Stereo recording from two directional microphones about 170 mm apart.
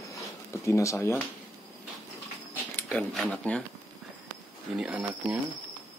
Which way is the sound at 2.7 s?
10° left (ahead or behind).